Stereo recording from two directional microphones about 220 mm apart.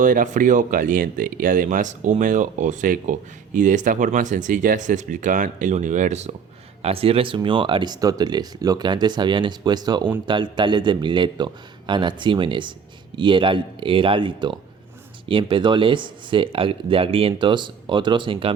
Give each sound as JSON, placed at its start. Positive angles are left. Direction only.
{"t": 0.0, "sound": "speech", "side_deg": -35}